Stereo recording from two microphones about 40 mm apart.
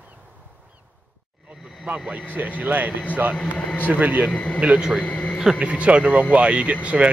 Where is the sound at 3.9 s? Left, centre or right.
Right.